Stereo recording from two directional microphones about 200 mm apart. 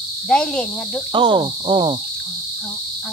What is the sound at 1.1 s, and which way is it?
Cricket, 25° right (ahead or behind).